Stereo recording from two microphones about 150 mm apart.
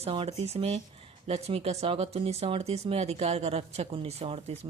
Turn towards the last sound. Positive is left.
turn(degrees=-40)  # may be behind; listen again after turning